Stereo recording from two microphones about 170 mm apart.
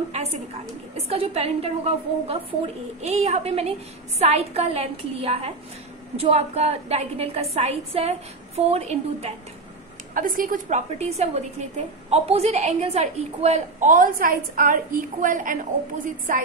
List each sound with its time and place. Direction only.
0.9 s a woman's voice: 35° right (ahead or behind)
10.1 s a woman's voice: 55° right (ahead or behind)